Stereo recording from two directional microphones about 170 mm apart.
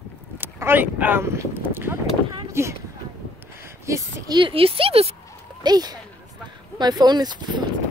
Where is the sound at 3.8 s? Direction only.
20° right (ahead or behind).